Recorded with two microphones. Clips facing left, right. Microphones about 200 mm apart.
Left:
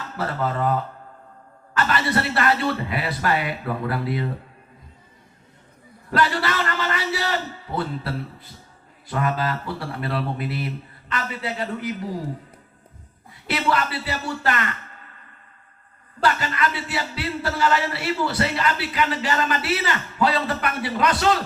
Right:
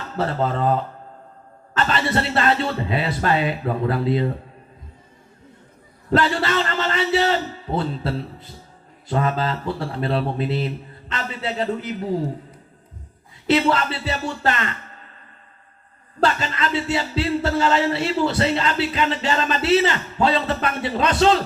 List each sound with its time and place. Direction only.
0.2 s speech: 25° right (ahead or behind)
6.1 s speech: 25° right (ahead or behind)
13.5 s speech: 25° right (ahead or behind)
16.2 s speech: 25° right (ahead or behind)